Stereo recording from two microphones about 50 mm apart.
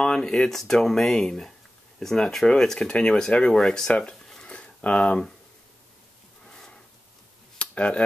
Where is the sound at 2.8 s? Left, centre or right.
Centre.